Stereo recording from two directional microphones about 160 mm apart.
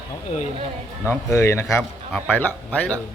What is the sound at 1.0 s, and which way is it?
A man's voice, 15° left (ahead or behind).